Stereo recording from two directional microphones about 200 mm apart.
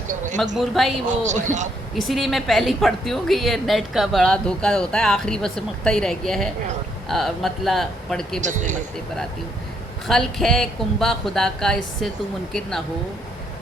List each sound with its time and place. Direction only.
0.5 s a woman's voice: centre (ahead or behind)
1.2 s speech: 35° right (ahead or behind)
2.0 s a woman's voice: centre (ahead or behind)
8.4 s speech: 35° right (ahead or behind)
10.1 s a woman's voice: centre (ahead or behind)